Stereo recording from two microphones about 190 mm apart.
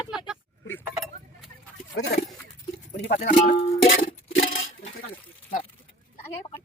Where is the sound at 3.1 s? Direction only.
55° left (ahead or behind).